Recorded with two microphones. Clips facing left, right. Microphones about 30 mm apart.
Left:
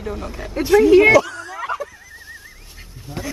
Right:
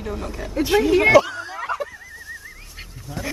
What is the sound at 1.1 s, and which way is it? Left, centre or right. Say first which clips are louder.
Speech: left 1 dB; centre.